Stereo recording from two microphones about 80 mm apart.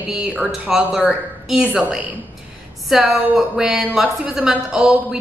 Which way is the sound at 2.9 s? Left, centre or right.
Centre.